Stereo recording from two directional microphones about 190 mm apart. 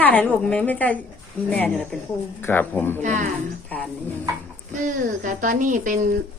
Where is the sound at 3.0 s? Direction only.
40° right (ahead or behind).